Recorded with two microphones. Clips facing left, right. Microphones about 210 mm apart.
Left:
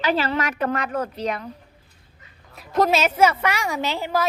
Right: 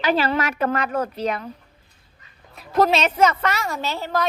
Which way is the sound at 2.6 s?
Centre (ahead or behind).